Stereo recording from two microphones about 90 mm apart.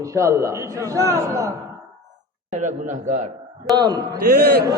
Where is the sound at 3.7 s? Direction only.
50° right (ahead or behind).